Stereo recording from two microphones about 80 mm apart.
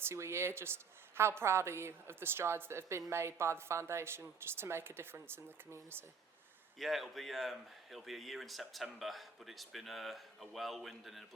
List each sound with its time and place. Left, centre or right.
0.1 s a woman's voice: right
6.7 s speech: centre